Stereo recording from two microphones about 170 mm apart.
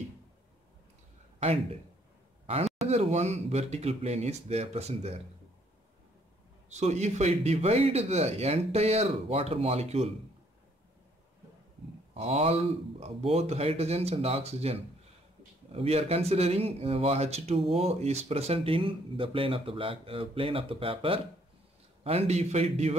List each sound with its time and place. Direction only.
1.4 s speech: 40° right (ahead or behind)
6.7 s speech: 40° right (ahead or behind)
12.1 s speech: 35° right (ahead or behind)